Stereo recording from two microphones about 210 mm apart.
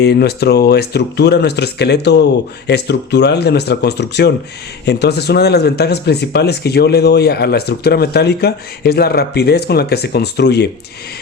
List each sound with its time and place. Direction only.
0.0 s speech: 50° left (ahead or behind)